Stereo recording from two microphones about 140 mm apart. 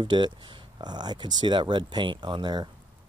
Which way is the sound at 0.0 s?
35° right (ahead or behind).